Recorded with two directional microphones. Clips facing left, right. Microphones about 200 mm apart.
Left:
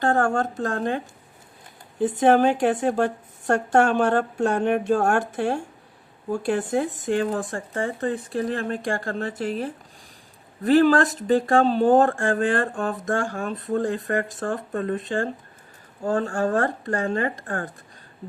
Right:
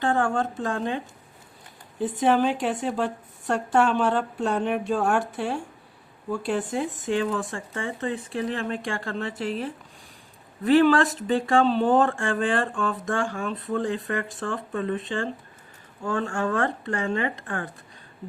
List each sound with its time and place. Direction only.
0.0 s speech: 45° left (ahead or behind)